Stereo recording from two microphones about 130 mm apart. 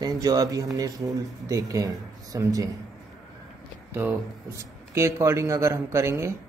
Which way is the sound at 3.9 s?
15° right (ahead or behind).